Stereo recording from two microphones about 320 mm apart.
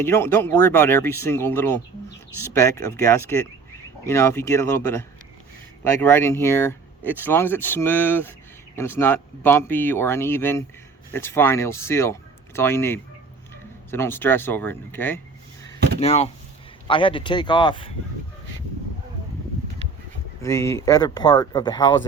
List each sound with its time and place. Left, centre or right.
0.0 s speech: centre
16.0 s speech: centre
20.4 s speech: centre